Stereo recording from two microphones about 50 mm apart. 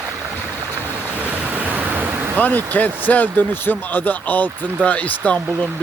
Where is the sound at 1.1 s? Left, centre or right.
Right.